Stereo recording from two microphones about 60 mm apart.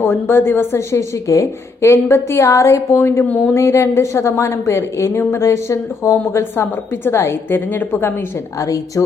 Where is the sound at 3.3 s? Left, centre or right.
Left.